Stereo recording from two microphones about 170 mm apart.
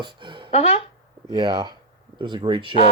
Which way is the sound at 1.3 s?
25° right (ahead or behind).